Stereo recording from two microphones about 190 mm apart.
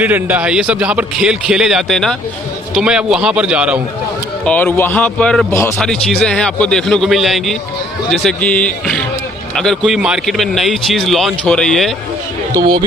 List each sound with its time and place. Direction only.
0.0 s speech: 10° right (ahead or behind)
4.5 s a man's voice: 10° left (ahead or behind)
12.5 s speech: 20° right (ahead or behind)